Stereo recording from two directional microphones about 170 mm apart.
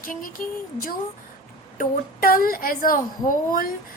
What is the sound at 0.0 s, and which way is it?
A woman's voice, 55° left (ahead or behind).